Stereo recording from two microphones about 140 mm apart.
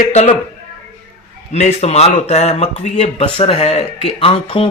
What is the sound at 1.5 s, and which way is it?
Speech, 45° left (ahead or behind).